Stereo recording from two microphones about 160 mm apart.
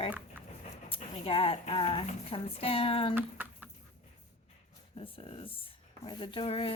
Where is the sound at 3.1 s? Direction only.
10° right (ahead or behind).